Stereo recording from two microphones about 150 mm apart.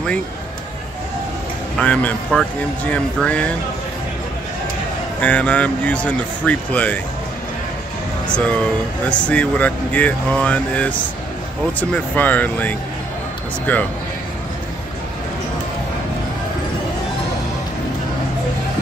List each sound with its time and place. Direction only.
1.8 s speech: 10° left (ahead or behind)
5.2 s speech: 10° left (ahead or behind)
8.3 s speech: 10° left (ahead or behind)